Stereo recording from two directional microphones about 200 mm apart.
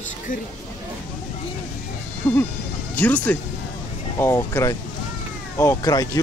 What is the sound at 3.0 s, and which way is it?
Speech, 10° left (ahead or behind).